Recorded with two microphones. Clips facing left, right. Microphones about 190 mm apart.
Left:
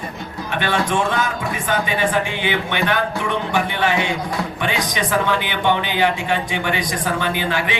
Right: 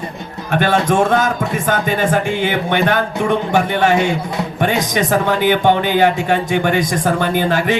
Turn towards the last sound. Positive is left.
turn(degrees=-45)  # may be behind; listen again after turning